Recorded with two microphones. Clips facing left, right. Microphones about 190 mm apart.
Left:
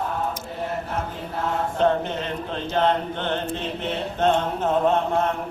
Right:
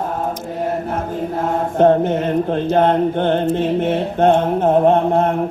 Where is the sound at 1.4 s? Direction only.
50° right (ahead or behind).